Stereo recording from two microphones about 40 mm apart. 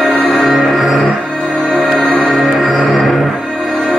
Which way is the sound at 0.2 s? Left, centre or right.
Centre.